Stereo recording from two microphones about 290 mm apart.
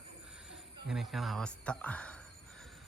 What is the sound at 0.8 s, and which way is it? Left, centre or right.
Speech, centre.